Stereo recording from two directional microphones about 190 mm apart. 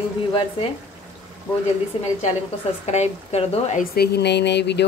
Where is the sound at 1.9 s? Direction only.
30° left (ahead or behind).